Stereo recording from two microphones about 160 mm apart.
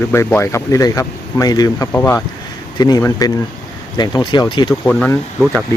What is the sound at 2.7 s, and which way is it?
Speech, 25° left (ahead or behind).